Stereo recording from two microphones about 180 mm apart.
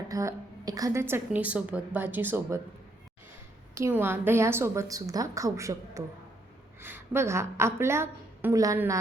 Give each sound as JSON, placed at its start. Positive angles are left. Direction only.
{"t": 0.1, "sound": "a woman's voice", "side_deg": -20}
{"t": 3.8, "sound": "a woman's voice", "side_deg": -15}